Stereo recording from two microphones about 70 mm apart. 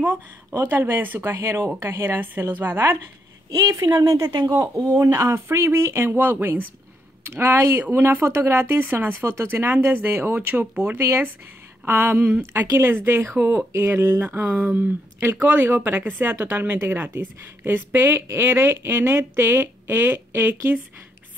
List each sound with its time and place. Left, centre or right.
0.6 s a woman's voice: right
3.4 s a woman's voice: right
4.8 s a woman's voice: right
13.4 s speech: centre
13.7 s a woman's voice: right
14.4 s speech: centre
15.4 s a woman's voice: right